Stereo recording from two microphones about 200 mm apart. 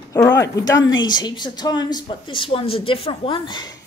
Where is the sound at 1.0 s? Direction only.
20° left (ahead or behind).